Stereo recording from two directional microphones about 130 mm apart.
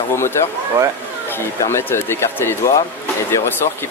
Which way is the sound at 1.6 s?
20° left (ahead or behind).